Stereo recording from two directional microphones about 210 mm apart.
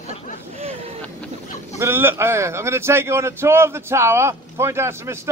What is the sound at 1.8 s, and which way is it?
A man's voice, 10° right (ahead or behind).